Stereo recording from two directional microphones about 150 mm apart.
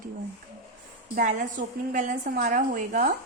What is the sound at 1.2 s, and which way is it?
A woman's voice, 55° right (ahead or behind).